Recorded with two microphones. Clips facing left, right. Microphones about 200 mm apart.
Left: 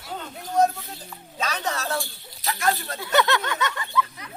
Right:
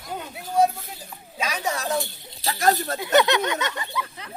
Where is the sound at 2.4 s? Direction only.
40° right (ahead or behind).